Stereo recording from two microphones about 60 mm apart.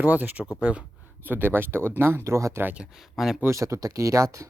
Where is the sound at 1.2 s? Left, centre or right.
Right.